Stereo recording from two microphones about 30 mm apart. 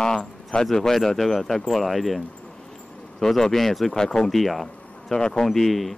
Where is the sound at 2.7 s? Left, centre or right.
Centre.